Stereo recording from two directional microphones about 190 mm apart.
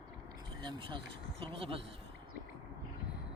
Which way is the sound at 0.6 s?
25° right (ahead or behind).